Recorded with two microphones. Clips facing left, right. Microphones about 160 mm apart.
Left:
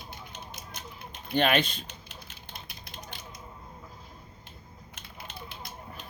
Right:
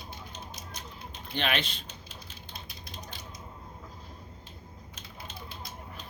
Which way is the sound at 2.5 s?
60° left (ahead or behind).